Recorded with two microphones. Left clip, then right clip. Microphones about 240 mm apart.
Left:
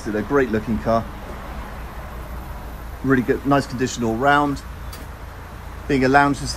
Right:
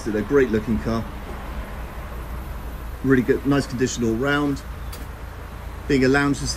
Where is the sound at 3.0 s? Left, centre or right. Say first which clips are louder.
Even; centre.